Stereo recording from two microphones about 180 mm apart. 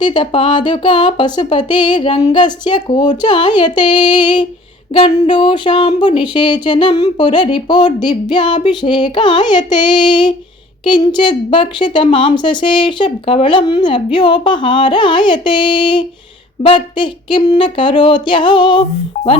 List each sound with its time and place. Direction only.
0.0 s a woman's voice: 25° left (ahead or behind)